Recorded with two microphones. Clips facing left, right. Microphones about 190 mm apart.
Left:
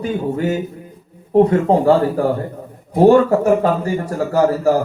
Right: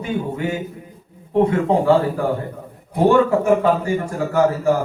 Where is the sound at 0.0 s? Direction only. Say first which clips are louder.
Left 3 dB; 40° left (ahead or behind).